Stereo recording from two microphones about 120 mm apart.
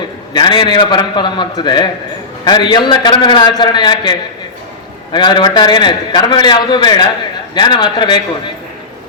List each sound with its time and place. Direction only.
0.3 s a man's voice: 40° left (ahead or behind)
5.1 s a man's voice: 40° left (ahead or behind)